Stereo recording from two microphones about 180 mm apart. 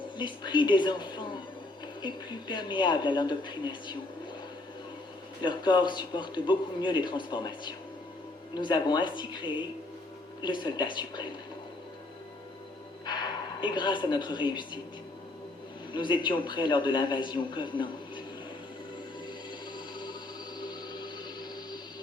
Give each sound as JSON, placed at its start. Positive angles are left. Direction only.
{"t": 0.2, "sound": "a man's voice", "side_deg": 25}
{"t": 5.4, "sound": "a man's voice", "side_deg": 25}
{"t": 13.1, "sound": "a man's voice", "side_deg": 25}
{"t": 15.9, "sound": "a man's voice", "side_deg": 25}